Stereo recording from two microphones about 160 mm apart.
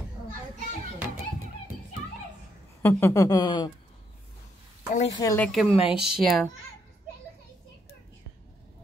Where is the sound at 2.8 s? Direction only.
15° left (ahead or behind).